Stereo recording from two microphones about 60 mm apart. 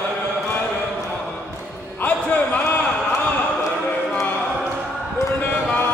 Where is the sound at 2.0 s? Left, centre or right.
Left.